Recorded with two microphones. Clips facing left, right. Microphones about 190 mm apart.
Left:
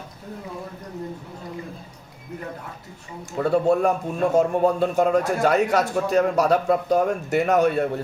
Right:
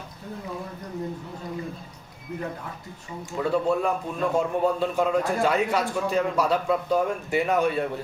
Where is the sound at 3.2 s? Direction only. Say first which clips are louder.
Left 4 dB; 45° left (ahead or behind).